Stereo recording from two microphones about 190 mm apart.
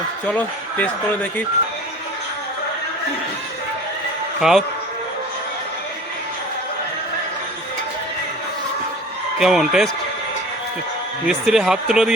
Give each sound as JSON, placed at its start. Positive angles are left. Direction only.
{"t": 0.3, "sound": "speech", "side_deg": 10}
{"t": 4.4, "sound": "speech", "side_deg": 0}
{"t": 9.4, "sound": "speech", "side_deg": 0}
{"t": 11.3, "sound": "speech", "side_deg": -5}